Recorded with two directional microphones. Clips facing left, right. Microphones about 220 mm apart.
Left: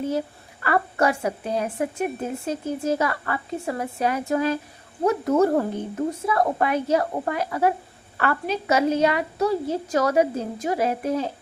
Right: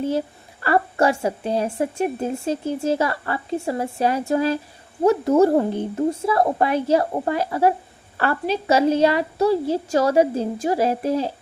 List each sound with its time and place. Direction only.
0.6 s a woman's voice: 30° right (ahead or behind)